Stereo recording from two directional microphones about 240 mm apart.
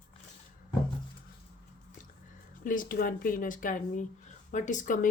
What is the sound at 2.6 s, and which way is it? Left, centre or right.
Speech, left.